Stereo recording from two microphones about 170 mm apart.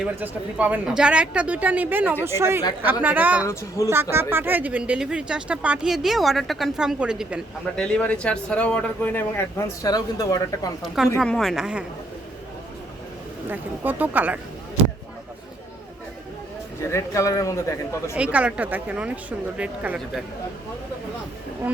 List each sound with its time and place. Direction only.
0.0 s speech: 10° right (ahead or behind)
3.4 s speech: 15° left (ahead or behind)
4.1 s speech: 15° right (ahead or behind); by 10.7 s 20° left (ahead or behind)
10.8 s speech: centre (ahead or behind)
13.5 s speech: 10° right (ahead or behind)
16.8 s speech: 15° left (ahead or behind)
18.1 s speech: 5° right (ahead or behind)